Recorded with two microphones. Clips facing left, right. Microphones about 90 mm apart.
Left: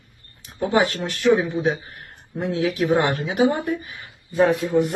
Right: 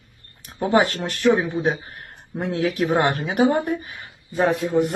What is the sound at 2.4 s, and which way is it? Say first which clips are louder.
Speech: even; 50° right (ahead or behind).